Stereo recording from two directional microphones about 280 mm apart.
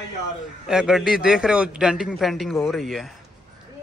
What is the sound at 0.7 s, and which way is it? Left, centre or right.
A man's voice, centre.